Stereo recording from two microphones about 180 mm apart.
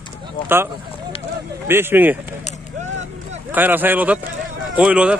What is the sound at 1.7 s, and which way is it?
Speech, 10° right (ahead or behind).